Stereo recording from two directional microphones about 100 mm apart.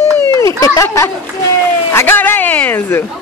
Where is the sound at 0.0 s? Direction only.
30° left (ahead or behind).